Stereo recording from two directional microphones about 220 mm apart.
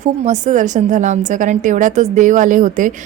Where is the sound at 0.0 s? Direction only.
35° right (ahead or behind).